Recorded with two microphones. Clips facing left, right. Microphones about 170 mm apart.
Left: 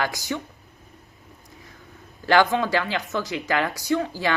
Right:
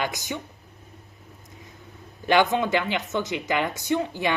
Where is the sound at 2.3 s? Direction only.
20° right (ahead or behind).